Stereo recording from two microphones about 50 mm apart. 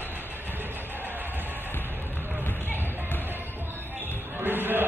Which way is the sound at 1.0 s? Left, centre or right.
Right.